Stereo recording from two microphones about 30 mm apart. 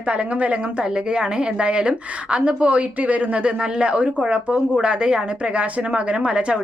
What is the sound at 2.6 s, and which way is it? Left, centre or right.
Speech, right.